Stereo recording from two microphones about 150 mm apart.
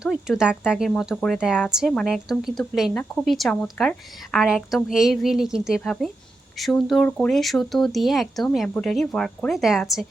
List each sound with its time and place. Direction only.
0.0 s speech: 5° right (ahead or behind)